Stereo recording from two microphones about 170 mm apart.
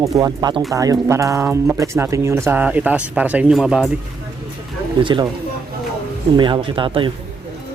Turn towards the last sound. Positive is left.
turn(degrees=-30)  # may be behind; listen again after turning